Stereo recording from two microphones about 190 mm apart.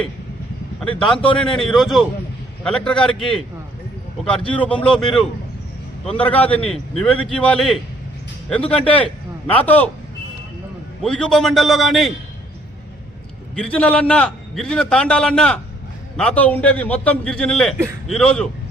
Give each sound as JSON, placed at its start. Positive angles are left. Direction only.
{"t": 0.9, "sound": "speech", "side_deg": 25}
{"t": 1.2, "sound": "a man's voice", "side_deg": 5}
{"t": 4.5, "sound": "a man's voice", "side_deg": 5}
{"t": 11.0, "sound": "a man's voice", "side_deg": 5}
{"t": 13.6, "sound": "a man's voice", "side_deg": 5}